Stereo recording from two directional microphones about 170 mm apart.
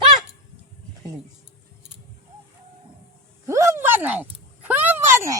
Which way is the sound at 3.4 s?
15° right (ahead or behind).